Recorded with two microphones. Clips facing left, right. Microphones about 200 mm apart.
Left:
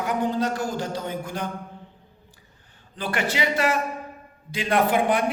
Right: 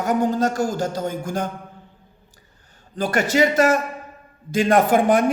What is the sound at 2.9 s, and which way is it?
A man's voice, 45° right (ahead or behind).